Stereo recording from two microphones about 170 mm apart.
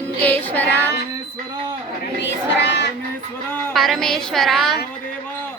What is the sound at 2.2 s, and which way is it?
Child singing, 90° left.